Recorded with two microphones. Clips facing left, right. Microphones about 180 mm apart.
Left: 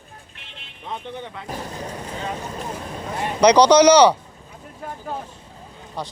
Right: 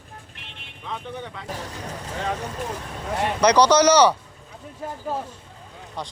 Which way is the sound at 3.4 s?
15° left (ahead or behind).